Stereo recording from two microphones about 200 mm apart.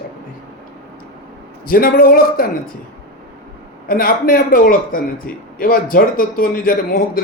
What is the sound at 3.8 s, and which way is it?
Speech, 45° left (ahead or behind).